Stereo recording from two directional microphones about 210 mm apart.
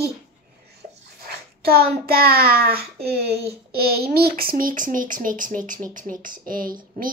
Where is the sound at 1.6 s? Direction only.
45° right (ahead or behind).